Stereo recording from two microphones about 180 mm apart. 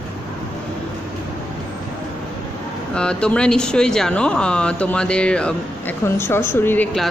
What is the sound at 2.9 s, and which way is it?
A woman's voice, 5° left (ahead or behind).